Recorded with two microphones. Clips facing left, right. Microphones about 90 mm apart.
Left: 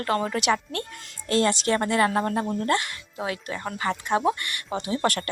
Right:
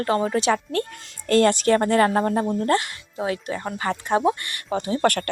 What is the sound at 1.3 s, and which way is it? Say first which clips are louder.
Speech: right 5 dB; 55° right (ahead or behind).